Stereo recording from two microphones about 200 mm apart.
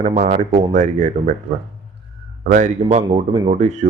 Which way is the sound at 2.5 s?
35° right (ahead or behind).